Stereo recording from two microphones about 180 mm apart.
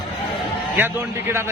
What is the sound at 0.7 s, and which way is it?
Speech, 10° right (ahead or behind).